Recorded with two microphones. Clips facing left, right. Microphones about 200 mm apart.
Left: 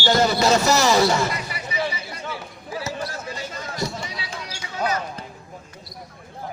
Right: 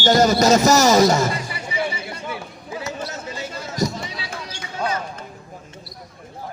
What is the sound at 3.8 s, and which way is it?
Run, 40° right (ahead or behind).